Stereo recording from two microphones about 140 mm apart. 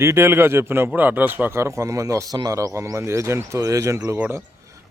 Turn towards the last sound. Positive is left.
turn(degrees=-20)  # may be behind; listen again after turning